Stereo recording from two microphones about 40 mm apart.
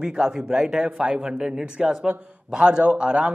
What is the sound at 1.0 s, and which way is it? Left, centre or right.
A man's voice, right.